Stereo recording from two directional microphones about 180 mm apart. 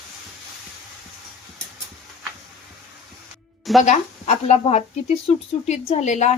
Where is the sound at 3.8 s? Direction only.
40° left (ahead or behind).